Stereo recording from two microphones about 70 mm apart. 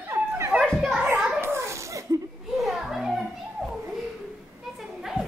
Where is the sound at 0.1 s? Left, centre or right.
Right.